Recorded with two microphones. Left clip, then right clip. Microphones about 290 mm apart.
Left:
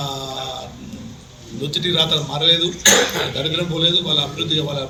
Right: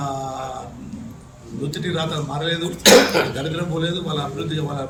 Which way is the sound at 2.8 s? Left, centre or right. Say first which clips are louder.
Right 8 dB; right.